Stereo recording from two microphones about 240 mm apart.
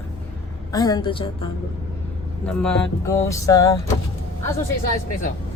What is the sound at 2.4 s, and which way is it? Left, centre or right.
Speech, centre.